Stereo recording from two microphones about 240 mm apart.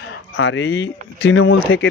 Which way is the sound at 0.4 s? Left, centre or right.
Left.